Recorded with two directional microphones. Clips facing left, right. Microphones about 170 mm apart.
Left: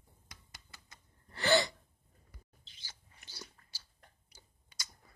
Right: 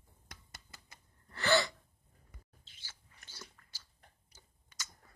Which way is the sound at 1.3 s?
30° left (ahead or behind).